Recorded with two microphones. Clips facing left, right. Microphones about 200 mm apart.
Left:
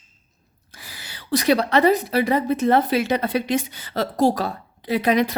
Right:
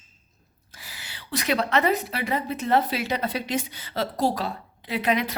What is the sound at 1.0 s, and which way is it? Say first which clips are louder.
A woman's voice: left 8 dB; 40° left (ahead or behind).